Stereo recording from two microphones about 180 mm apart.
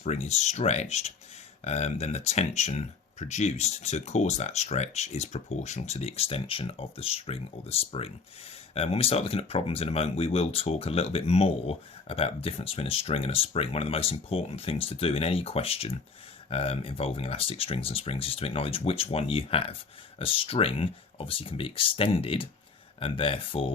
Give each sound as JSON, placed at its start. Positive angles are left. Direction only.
{"t": 0.0, "sound": "speech", "side_deg": 35}